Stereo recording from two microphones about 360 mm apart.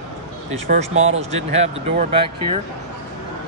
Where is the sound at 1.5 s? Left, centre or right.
Centre.